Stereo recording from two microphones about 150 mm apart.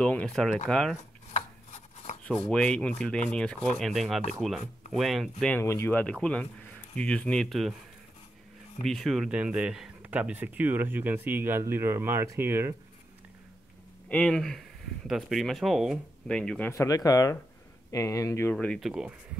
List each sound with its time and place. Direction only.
0.0 s speech: 5° left (ahead or behind)
2.2 s speech: 15° left (ahead or behind)
2.5 s speech: 5° left (ahead or behind)
5.6 s speech: 15° left (ahead or behind); by 7.7 s centre (ahead or behind)
8.8 s speech: centre (ahead or behind); by 12.7 s 15° right (ahead or behind)
14.0 s speech: 5° left (ahead or behind)
16.7 s speech: 25° left (ahead or behind)
18.8 s speech: 5° right (ahead or behind)